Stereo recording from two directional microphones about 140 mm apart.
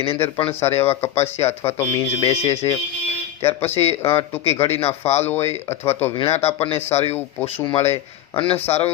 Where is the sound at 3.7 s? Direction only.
40° left (ahead or behind).